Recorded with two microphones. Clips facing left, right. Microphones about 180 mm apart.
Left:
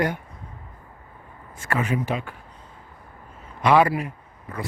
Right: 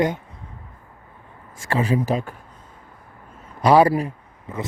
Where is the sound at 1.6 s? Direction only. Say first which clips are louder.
Right 4 dB; 30° right (ahead or behind).